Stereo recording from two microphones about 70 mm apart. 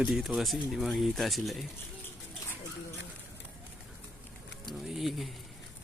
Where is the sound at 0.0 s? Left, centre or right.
Centre.